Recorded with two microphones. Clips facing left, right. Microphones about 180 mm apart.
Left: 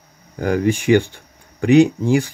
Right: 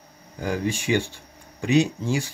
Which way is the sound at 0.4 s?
60° left (ahead or behind).